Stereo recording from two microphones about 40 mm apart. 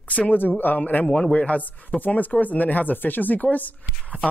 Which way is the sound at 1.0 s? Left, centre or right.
Centre.